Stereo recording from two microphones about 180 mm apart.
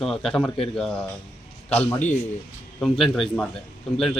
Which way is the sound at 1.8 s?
15° left (ahead or behind).